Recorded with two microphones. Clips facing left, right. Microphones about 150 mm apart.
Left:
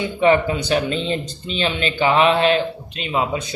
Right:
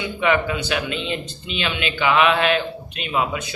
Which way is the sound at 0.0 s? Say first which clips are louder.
Left 4 dB; 35° left (ahead or behind).